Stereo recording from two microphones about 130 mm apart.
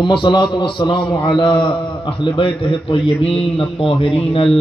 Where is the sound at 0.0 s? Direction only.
35° left (ahead or behind).